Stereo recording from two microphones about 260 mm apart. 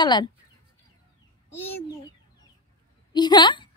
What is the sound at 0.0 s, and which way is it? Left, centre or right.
Speech, centre.